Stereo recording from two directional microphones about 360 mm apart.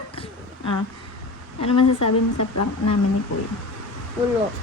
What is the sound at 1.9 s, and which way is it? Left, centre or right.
Speech, left.